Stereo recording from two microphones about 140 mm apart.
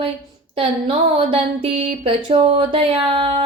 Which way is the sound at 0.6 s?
40° right (ahead or behind).